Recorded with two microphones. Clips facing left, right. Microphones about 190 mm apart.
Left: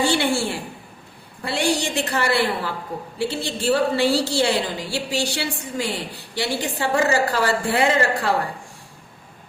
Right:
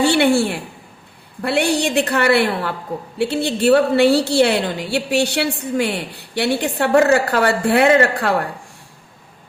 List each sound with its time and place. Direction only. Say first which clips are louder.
0.0 s a woman's voice: right 6 dB; 60° right (ahead or behind)